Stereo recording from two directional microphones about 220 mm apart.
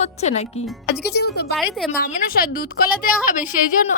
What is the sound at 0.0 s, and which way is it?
Speech, 30° left (ahead or behind).